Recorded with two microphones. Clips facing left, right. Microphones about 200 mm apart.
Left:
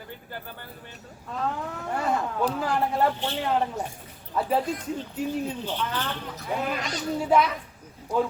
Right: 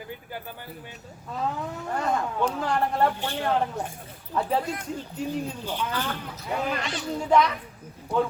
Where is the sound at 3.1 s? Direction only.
10° right (ahead or behind).